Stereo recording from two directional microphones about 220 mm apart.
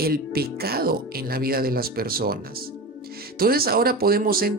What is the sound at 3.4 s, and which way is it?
Speech, 45° right (ahead or behind).